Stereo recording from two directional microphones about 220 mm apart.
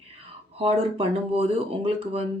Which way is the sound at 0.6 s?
25° right (ahead or behind).